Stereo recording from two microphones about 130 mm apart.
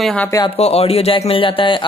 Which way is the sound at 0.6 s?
55° left (ahead or behind).